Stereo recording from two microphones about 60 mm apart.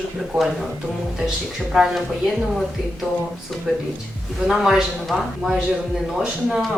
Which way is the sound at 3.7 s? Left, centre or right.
Centre.